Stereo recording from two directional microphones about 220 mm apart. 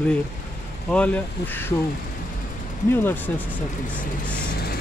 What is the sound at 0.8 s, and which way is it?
Speech, 5° left (ahead or behind).